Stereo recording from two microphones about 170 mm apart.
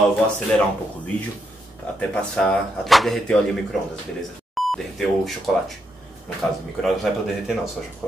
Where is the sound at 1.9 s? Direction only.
5° left (ahead or behind).